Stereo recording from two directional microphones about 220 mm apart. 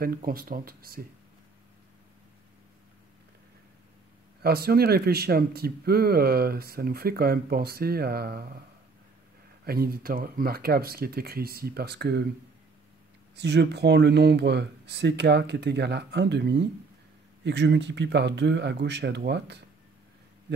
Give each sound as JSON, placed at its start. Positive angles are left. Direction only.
{"t": 0.0, "sound": "speech", "side_deg": -40}
{"t": 4.4, "sound": "speech", "side_deg": -45}
{"t": 9.7, "sound": "speech", "side_deg": -45}
{"t": 13.4, "sound": "speech", "side_deg": -50}